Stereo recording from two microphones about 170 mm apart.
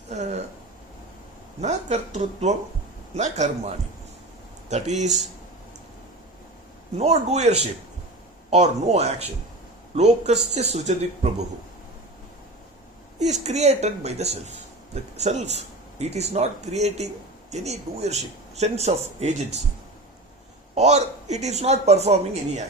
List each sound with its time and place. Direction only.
0.1 s a sound: 40° right (ahead or behind)
1.6 s speech: 40° right (ahead or behind)
4.7 s speech: 45° right (ahead or behind)
7.0 s speech: 40° right (ahead or behind)
13.1 s speech: 40° right (ahead or behind)
20.7 s speech: 40° right (ahead or behind)